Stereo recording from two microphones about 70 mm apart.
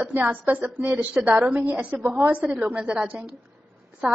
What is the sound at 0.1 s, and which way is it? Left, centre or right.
A woman's voice, right.